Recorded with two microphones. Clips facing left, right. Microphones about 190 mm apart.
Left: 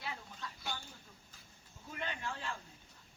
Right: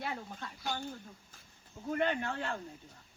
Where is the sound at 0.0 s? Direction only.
55° right (ahead or behind).